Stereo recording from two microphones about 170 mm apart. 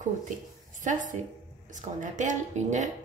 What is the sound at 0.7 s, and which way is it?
A woman's voice, 50° right (ahead or behind).